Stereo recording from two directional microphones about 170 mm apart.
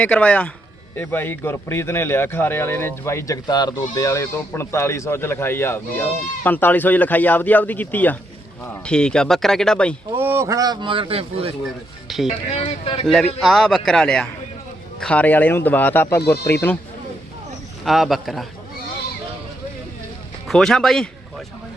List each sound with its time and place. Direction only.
0.0 s speech: 10° left (ahead or behind)
10.2 s speech: 15° right (ahead or behind); by 11.5 s 35° right (ahead or behind)
12.0 s speech: centre (ahead or behind)
12.5 s speech: 35° left (ahead or behind)
13.1 s speech: centre (ahead or behind)
17.8 s speech: centre (ahead or behind)
20.5 s speech: centre (ahead or behind)